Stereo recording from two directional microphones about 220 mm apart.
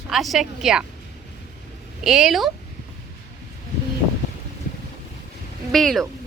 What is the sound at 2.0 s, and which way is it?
Speech, centre (ahead or behind).